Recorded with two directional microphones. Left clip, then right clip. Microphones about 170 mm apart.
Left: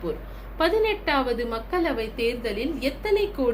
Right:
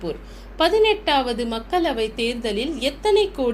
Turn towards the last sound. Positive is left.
turn(degrees=-50)  # may be behind; listen again after turning